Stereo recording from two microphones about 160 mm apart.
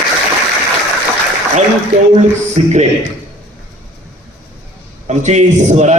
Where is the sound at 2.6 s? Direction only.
45° right (ahead or behind).